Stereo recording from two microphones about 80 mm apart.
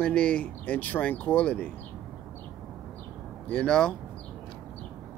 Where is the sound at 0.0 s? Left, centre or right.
Centre.